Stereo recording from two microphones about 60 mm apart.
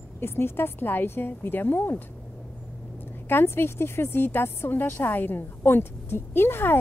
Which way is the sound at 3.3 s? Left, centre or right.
Left.